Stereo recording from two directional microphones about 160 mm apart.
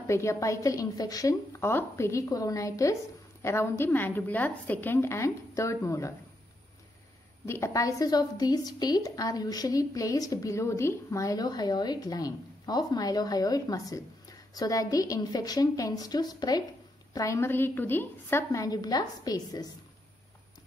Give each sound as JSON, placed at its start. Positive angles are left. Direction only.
{"t": 0.0, "sound": "a woman's voice", "side_deg": 20}
{"t": 7.4, "sound": "a woman's voice", "side_deg": 15}